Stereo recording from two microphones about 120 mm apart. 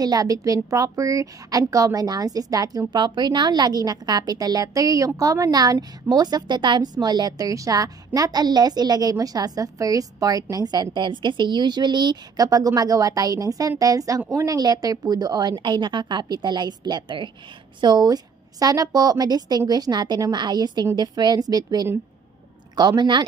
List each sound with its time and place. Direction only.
0.0 s a woman's voice: 30° right (ahead or behind)